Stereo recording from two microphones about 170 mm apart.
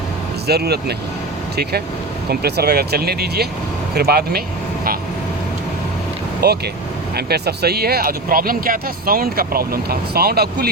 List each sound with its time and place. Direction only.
0.4 s speech: 70° right (ahead or behind)
2.3 s speech: 70° right (ahead or behind)
6.4 s speech: 70° right (ahead or behind)